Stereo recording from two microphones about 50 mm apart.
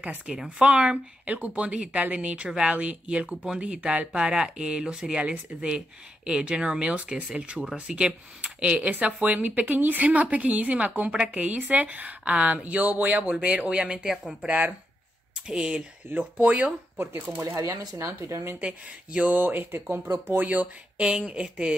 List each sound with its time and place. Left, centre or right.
0.3 s speech: centre
8.9 s a woman's voice: right; by 15.8 s centre
16.1 s a woman's voice: right
17.0 s a woman's voice: right
17.4 s speech: right
17.6 s speech: right
18.6 s a woman's voice: right
20.3 s a woman's voice: right
21.0 s speech: centre